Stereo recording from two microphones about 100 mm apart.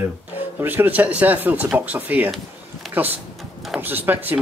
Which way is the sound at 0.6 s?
20° right (ahead or behind).